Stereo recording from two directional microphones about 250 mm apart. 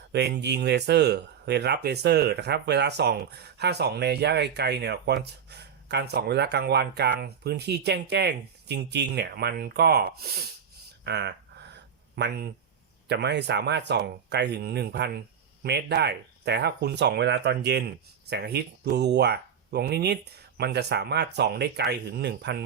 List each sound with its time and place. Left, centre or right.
0.1 s speech: right
11.0 s a sound: right
13.1 s speech: right